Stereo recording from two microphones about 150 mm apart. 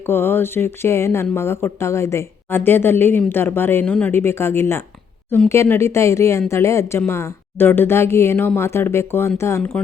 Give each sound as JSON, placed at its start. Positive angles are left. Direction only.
{"t": 0.0, "sound": "a woman's voice", "side_deg": 15}